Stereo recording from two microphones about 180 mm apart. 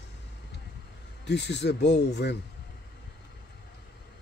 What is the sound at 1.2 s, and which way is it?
Speech, 75° left (ahead or behind).